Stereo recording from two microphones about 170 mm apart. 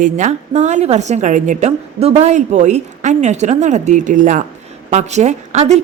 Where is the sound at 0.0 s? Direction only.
45° right (ahead or behind).